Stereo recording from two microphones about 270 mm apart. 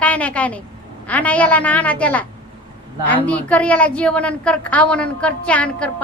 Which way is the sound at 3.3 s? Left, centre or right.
Centre.